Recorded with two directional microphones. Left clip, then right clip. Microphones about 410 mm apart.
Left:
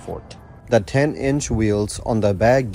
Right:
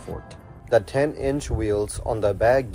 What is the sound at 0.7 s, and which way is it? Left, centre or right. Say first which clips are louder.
Speech: left 2 dB; centre.